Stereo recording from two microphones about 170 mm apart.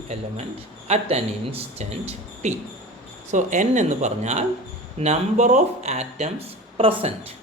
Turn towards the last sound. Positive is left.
turn(degrees=-35)  # may be behind; listen again after turning